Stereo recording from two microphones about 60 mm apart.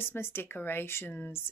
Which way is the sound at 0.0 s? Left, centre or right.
Left.